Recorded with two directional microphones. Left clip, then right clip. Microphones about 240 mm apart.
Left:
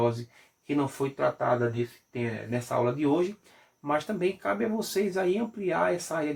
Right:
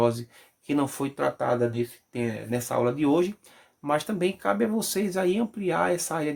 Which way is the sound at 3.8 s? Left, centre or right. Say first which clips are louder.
Right 2 dB; right.